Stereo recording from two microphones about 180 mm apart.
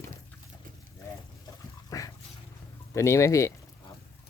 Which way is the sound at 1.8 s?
20° left (ahead or behind).